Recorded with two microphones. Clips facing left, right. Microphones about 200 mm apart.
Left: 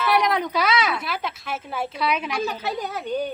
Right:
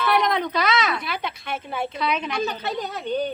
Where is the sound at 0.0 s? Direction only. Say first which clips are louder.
Even; 10° left (ahead or behind).